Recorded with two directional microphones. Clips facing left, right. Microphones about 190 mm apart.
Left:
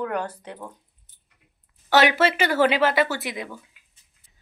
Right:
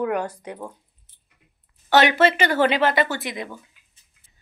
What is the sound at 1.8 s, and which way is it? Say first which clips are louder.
Speech: right 2 dB; 5° left (ahead or behind).